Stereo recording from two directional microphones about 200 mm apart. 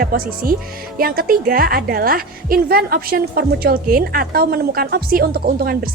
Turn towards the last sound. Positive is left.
turn(degrees=-50)  # may be behind; listen again after turning